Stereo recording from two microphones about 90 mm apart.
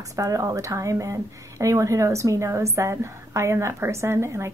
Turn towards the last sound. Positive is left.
turn(degrees=-30)  # may be behind; listen again after turning